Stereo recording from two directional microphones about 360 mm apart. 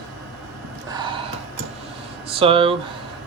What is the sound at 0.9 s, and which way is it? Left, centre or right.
Gasp, centre.